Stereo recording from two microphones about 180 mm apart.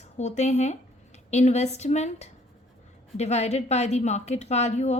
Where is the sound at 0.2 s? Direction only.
40° left (ahead or behind).